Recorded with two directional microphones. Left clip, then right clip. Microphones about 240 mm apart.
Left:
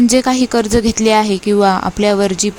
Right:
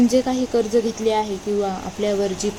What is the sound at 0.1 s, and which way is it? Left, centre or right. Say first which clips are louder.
A woman's voice: left 6 dB; left.